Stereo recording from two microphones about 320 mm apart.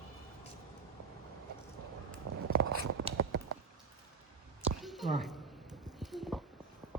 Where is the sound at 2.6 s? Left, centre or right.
Right.